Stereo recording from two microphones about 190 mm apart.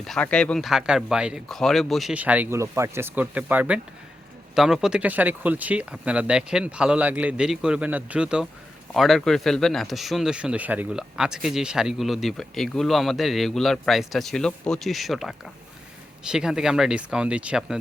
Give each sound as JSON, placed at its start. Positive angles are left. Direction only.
{"t": 0.0, "sound": "speech", "side_deg": 5}